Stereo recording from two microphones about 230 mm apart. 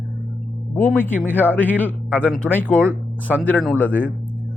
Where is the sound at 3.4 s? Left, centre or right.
Centre.